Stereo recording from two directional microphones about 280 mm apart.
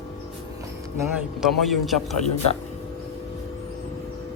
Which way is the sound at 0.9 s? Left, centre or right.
Centre.